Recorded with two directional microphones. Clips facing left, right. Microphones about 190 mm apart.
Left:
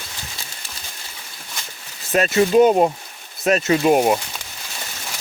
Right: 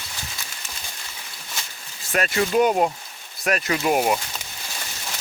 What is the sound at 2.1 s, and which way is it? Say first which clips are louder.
Speech: left 6 dB; 25° left (ahead or behind).